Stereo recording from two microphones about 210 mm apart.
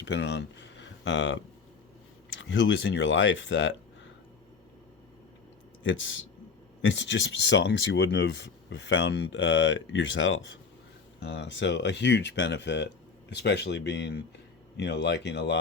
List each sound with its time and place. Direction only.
0.0 s speech: 60° left (ahead or behind)
5.8 s speech: 65° left (ahead or behind)